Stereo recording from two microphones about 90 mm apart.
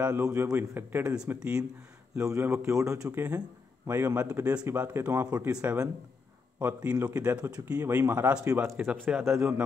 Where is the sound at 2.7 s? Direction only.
35° right (ahead or behind).